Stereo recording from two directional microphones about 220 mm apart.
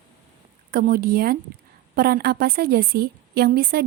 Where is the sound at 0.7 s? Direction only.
40° right (ahead or behind).